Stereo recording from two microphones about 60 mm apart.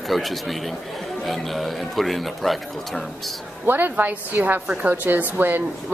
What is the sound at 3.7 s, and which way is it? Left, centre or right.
A woman's voice, right.